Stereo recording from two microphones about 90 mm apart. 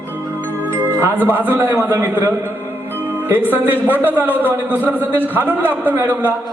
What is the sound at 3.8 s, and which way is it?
A man's voice, 20° right (ahead or behind).